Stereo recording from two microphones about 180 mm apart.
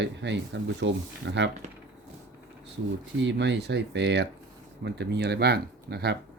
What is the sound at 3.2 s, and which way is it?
Speech, 80° right.